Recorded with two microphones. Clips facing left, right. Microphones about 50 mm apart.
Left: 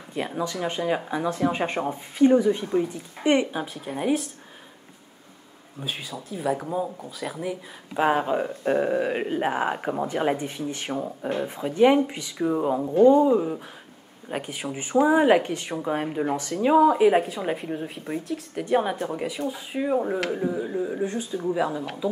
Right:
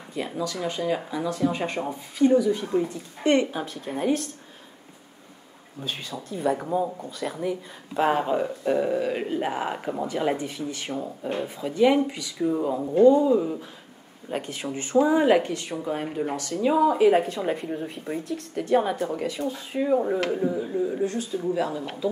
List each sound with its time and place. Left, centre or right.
0.1 s speech: left
2.7 s a woman's voice: centre
5.8 s a woman's voice: centre; by 13.5 s left
14.3 s a woman's voice: centre